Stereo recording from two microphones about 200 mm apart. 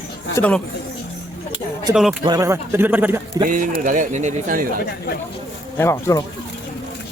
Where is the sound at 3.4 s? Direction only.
40° right (ahead or behind).